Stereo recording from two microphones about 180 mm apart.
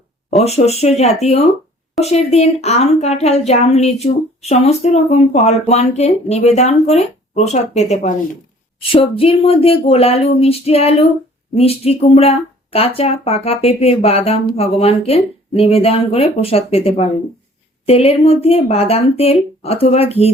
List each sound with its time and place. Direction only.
0.4 s a woman's voice: 35° left (ahead or behind)